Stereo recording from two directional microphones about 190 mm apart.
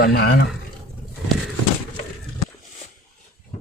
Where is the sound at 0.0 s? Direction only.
55° left (ahead or behind).